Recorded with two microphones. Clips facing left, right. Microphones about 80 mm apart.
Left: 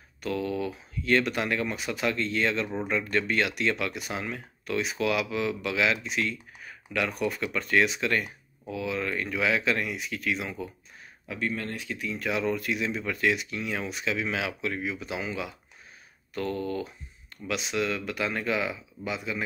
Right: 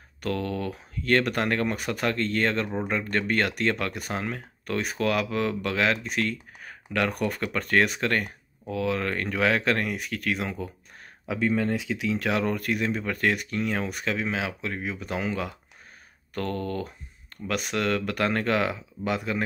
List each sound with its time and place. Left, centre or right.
0.2 s speech: right
11.3 s speech: right